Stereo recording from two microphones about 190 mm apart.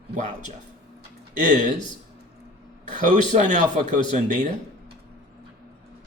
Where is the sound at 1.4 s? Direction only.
40° right (ahead or behind).